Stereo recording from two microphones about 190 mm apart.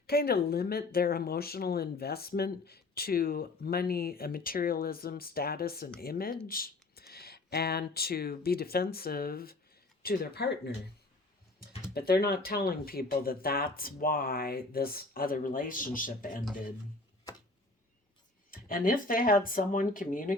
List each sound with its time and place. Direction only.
0.1 s speech: 55° left (ahead or behind)
11.9 s speech: 55° left (ahead or behind)
18.5 s speech: 50° left (ahead or behind)